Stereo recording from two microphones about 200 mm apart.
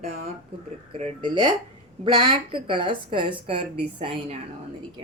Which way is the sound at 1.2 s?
20° right (ahead or behind).